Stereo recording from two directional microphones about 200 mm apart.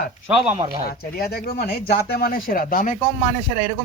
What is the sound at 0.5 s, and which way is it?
Speech, 30° right (ahead or behind).